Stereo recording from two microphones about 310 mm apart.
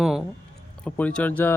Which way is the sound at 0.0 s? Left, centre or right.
Centre.